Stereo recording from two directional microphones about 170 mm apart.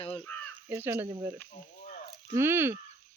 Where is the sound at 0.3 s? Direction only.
10° left (ahead or behind).